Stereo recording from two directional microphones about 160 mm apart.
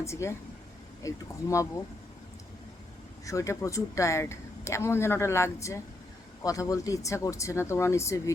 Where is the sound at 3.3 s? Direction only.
20° left (ahead or behind).